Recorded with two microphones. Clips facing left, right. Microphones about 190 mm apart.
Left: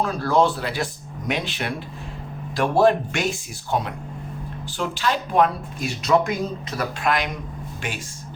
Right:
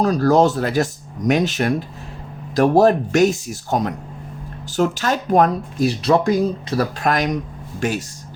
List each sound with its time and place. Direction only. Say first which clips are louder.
0.0 s speech: right 5 dB; 40° right (ahead or behind)